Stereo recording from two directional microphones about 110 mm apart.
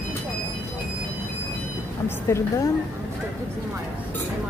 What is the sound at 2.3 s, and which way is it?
Speech, 25° left (ahead or behind).